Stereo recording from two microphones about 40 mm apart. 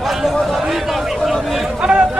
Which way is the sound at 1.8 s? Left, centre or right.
Centre.